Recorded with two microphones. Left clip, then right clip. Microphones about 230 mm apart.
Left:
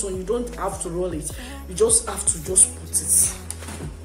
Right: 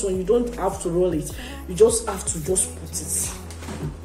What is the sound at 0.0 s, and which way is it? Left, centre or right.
Speech, centre.